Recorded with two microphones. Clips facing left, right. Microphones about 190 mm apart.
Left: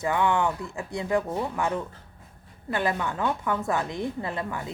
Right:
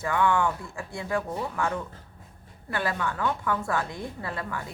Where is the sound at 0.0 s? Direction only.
20° left (ahead or behind).